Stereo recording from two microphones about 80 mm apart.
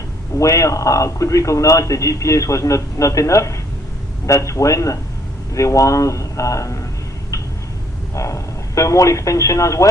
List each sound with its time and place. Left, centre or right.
0.3 s a man's voice: left
8.1 s a man's voice: left